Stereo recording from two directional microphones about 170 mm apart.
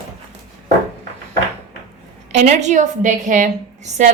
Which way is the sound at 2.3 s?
40° right (ahead or behind).